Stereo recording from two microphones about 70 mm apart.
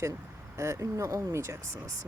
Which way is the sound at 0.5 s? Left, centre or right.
Right.